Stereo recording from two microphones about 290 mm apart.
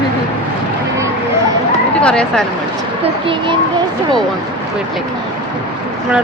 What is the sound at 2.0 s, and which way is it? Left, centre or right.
Speech, centre.